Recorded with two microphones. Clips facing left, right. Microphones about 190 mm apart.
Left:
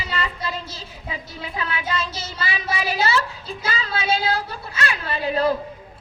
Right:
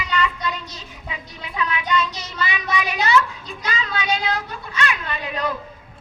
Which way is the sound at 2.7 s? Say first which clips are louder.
Right 2 dB; 30° left (ahead or behind).